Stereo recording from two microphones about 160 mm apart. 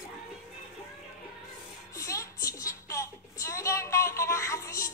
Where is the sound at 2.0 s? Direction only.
20° left (ahead or behind).